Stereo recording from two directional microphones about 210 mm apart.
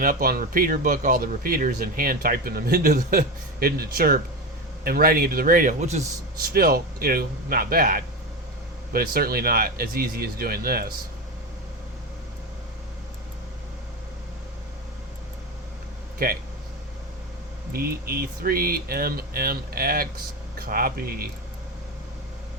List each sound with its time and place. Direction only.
0.0 s speech: 40° right (ahead or behind)
6.5 s speech: 45° right (ahead or behind)
16.1 s speech: 45° right (ahead or behind)
17.7 s speech: 45° right (ahead or behind)